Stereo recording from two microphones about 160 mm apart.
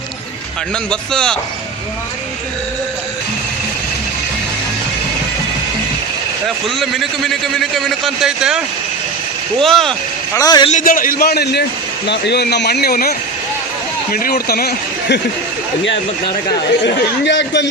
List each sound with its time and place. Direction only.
0.9 s a man's voice: 5° left (ahead or behind)
6.7 s a man's voice: centre (ahead or behind)
10.3 s a man's voice: 25° left (ahead or behind)
10.7 s a man's voice: 55° left (ahead or behind); by 15.2 s 80° left
16.8 s a man's voice: 90° left